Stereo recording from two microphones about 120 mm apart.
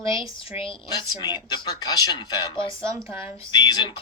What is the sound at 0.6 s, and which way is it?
Speech, 40° left (ahead or behind).